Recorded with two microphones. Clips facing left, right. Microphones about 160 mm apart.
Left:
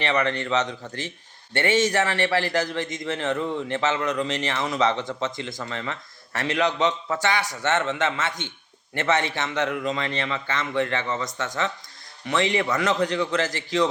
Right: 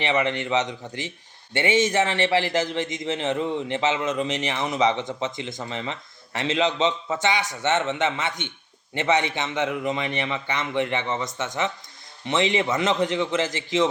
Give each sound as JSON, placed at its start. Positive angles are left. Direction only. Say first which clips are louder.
{"t": 0.0, "sound": "a man's voice", "louder": "even", "side_deg": -20}